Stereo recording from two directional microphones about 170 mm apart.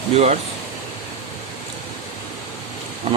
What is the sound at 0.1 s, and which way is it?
Speech, 40° right (ahead or behind).